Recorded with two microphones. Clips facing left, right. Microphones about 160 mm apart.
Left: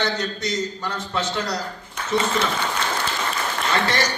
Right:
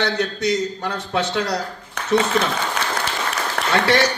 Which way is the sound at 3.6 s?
65° right (ahead or behind).